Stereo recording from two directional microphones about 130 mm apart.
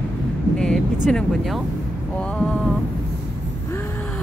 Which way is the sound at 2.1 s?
10° left (ahead or behind).